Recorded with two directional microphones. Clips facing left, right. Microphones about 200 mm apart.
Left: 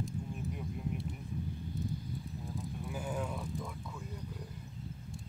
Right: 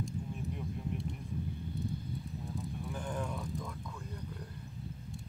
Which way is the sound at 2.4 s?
Centre (ahead or behind).